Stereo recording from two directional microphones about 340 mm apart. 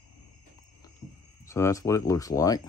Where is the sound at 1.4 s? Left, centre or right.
Centre.